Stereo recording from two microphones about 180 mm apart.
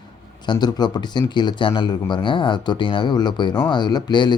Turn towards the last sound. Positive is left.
turn(degrees=25)  # may be behind; listen again after turning